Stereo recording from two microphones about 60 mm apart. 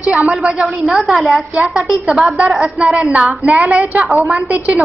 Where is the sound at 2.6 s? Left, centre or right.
Centre.